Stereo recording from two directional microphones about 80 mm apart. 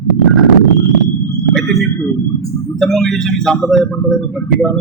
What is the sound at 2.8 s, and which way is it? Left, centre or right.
Speech, centre.